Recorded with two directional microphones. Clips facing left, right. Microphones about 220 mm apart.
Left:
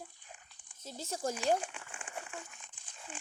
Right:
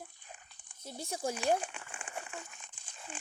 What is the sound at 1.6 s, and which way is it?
Crumpling, 20° right (ahead or behind).